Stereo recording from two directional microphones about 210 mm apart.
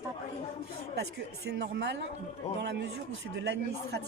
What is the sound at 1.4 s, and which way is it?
A woman's voice, 55° right (ahead or behind).